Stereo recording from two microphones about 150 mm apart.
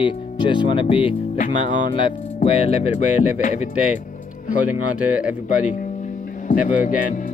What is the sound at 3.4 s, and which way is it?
Speech, 50° left (ahead or behind).